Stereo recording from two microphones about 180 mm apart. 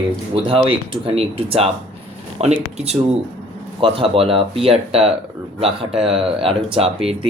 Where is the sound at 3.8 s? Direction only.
30° right (ahead or behind).